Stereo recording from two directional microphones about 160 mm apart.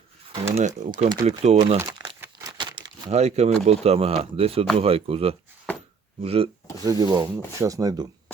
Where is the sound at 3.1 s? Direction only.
45° right (ahead or behind).